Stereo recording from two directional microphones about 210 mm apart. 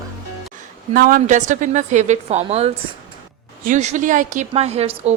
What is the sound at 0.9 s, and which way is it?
A woman's voice, 40° right (ahead or behind).